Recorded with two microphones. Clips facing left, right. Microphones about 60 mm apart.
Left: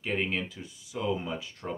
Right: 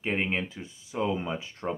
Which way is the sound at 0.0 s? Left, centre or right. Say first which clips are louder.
Right 2 dB; right.